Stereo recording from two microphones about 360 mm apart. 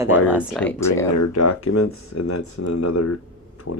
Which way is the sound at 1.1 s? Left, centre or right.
Left.